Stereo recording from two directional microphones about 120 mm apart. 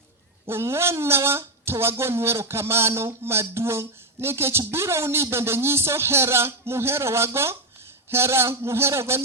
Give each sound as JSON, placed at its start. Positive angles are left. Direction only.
{"t": 0.4, "sound": "speech", "side_deg": -20}